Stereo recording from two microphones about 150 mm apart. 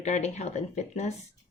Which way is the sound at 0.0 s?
50° left (ahead or behind).